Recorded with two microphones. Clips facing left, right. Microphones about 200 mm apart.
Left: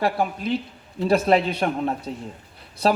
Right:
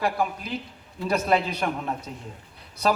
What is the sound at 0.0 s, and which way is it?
Speech, 30° left (ahead or behind).